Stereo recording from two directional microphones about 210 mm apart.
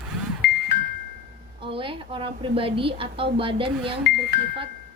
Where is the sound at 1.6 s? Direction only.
25° right (ahead or behind).